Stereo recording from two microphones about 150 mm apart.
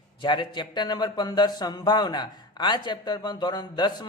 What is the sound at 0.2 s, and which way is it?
Speech, 30° left (ahead or behind).